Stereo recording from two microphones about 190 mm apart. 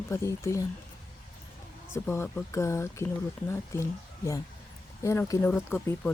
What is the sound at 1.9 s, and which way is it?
Speech, 15° left (ahead or behind).